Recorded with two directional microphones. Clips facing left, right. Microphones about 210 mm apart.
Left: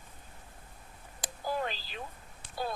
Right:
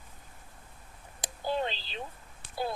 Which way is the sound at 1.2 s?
25° right (ahead or behind).